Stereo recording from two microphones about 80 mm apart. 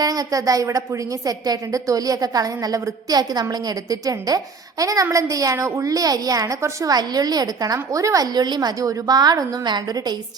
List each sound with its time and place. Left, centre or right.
0.0 s a woman's voice: right